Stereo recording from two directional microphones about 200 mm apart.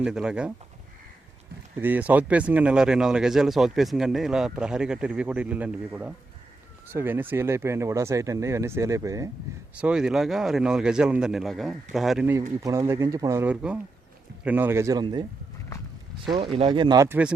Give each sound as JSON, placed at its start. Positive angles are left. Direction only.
{"t": 0.0, "sound": "speech", "side_deg": -5}
{"t": 1.8, "sound": "speech", "side_deg": -10}
{"t": 9.7, "sound": "speech", "side_deg": -5}
{"t": 12.3, "sound": "speech", "side_deg": -15}
{"t": 16.6, "sound": "speech", "side_deg": -25}